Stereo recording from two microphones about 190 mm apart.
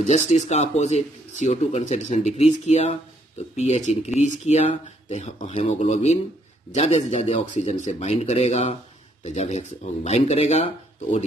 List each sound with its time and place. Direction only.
0.0 s speech: 40° left (ahead or behind)